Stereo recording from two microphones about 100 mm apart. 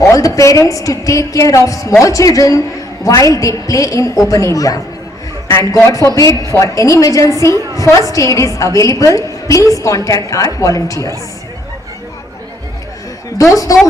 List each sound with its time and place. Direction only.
0.0 s a woman's voice: 35° left (ahead or behind)
13.4 s a woman's voice: 35° left (ahead or behind)